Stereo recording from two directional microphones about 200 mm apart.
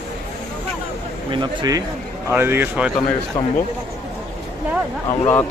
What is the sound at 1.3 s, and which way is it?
Speech, 20° right (ahead or behind).